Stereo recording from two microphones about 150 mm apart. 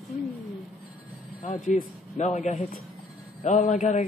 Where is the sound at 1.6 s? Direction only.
55° left (ahead or behind).